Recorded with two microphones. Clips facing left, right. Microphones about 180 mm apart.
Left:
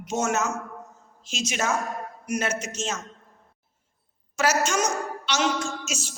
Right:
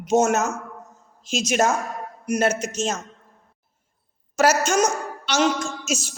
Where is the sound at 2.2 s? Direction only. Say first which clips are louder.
Right 6 dB; 35° right (ahead or behind).